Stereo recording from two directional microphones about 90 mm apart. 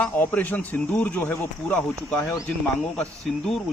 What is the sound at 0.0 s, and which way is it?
Speech, 20° left (ahead or behind).